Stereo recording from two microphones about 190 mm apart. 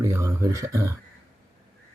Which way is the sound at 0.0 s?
15° right (ahead or behind).